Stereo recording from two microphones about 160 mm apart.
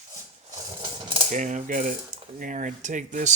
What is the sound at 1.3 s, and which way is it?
Speech, 50° right (ahead or behind).